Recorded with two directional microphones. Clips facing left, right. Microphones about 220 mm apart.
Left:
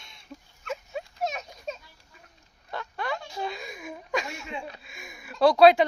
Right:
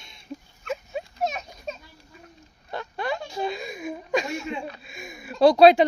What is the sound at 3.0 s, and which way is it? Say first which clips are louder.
A woman's voice: right 4 dB; 30° right (ahead or behind).